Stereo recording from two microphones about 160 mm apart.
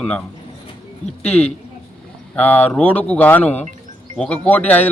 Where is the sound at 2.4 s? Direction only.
10° left (ahead or behind).